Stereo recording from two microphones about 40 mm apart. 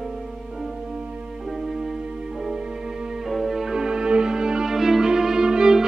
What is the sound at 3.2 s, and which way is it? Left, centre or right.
Music, centre.